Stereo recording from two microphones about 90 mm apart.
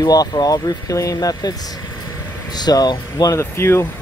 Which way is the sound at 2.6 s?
50° left (ahead or behind).